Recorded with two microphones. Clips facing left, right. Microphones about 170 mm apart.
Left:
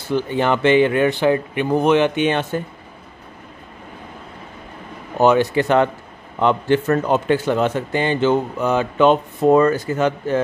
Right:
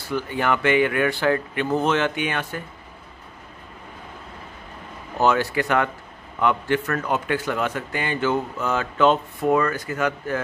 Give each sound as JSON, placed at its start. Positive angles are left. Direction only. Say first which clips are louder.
{"t": 0.1, "sound": "speech", "louder": "left 5 dB", "side_deg": 25}
{"t": 5.1, "sound": "speech", "louder": "left 6 dB", "side_deg": 20}
{"t": 9.5, "sound": "speech", "louder": "left 7 dB", "side_deg": 30}